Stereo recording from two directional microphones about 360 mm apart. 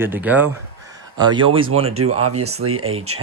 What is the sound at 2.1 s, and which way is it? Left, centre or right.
Speech, right.